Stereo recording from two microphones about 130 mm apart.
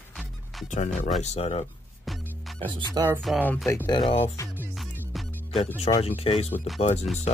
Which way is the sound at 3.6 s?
20° left (ahead or behind).